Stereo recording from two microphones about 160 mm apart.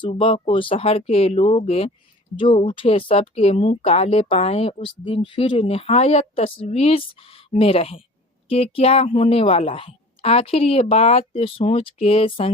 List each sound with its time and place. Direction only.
0.0 s speech: 35° left (ahead or behind)